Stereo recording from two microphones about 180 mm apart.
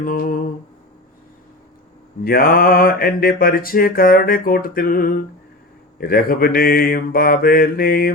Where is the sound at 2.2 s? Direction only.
55° left (ahead or behind).